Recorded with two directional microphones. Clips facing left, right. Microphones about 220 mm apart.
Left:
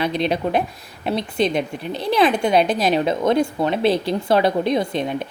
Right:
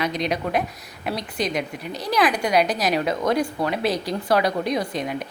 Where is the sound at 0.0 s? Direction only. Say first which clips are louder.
Left 4 dB; 30° left (ahead or behind).